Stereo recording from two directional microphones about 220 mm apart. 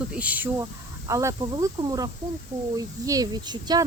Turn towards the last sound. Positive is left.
turn(degrees=-15)  # may be behind; listen again after turning